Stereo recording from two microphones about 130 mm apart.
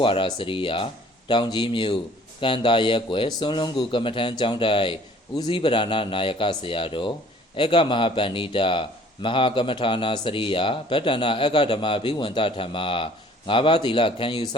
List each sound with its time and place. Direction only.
0.0 s a man's voice: 40° left (ahead or behind)